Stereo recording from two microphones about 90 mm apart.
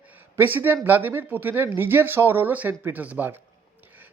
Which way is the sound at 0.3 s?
25° right (ahead or behind).